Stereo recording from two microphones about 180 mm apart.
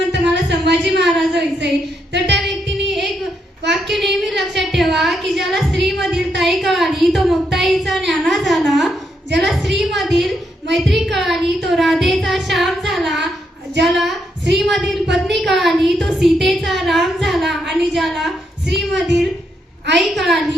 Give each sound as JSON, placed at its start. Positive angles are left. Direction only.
{"t": 0.1, "sound": "a sound", "side_deg": -70}
{"t": 2.1, "sound": "singing", "side_deg": -75}
{"t": 2.4, "sound": "music", "side_deg": 0}
{"t": 3.8, "sound": "a sound", "side_deg": 0}
{"t": 9.4, "sound": "a woman's voice", "side_deg": 0}
{"t": 11.7, "sound": "child singing", "side_deg": 0}
{"t": 13.8, "sound": "a woman's voice", "side_deg": 0}
{"t": 14.5, "sound": "a sound", "side_deg": 0}
{"t": 15.1, "sound": "a woman's voice", "side_deg": 0}